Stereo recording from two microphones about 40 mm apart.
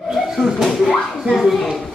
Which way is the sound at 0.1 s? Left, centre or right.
Centre.